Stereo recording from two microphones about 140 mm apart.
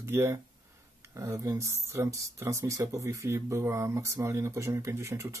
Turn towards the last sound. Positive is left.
turn(degrees=-20)  # may be behind; listen again after turning